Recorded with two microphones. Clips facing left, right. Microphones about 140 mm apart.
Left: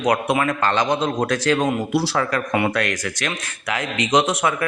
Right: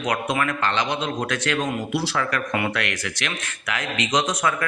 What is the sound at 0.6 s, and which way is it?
Speech, 45° left (ahead or behind).